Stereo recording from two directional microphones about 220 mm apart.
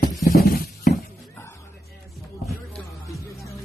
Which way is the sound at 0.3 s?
45° left (ahead or behind).